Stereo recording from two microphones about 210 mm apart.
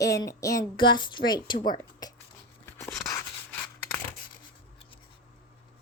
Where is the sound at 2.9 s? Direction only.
Centre (ahead or behind).